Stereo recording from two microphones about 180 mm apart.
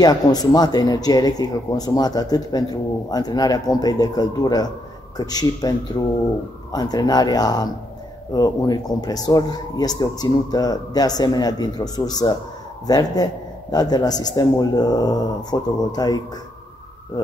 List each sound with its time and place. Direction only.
0.0 s speech: 20° left (ahead or behind)